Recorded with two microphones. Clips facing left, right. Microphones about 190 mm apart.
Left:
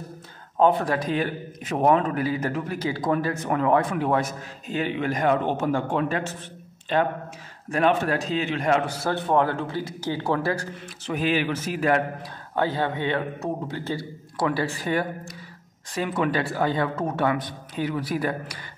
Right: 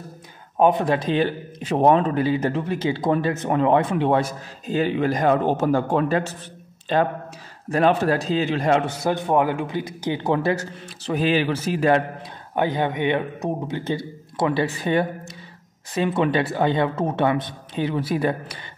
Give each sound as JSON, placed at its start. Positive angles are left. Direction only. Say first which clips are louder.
{"t": 0.6, "sound": "a man's voice", "louder": "right 2 dB", "side_deg": -15}
{"t": 7.7, "sound": "a man's voice", "louder": "right 3 dB", "side_deg": -35}
{"t": 9.0, "sound": "a man's voice", "louder": "right 2 dB", "side_deg": -15}
{"t": 11.1, "sound": "a man's voice", "louder": "right 3 dB", "side_deg": -30}
{"t": 12.5, "sound": "a man's voice", "louder": "right 3 dB", "side_deg": -15}